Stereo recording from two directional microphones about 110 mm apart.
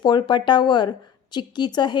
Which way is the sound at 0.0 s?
45° left (ahead or behind).